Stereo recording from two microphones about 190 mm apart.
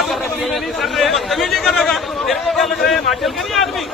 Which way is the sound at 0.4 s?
Centre (ahead or behind).